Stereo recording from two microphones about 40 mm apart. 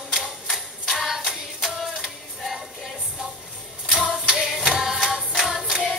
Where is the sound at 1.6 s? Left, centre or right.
Centre.